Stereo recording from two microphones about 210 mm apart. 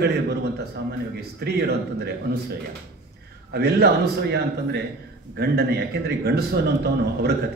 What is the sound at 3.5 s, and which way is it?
Speech, 50° right (ahead or behind).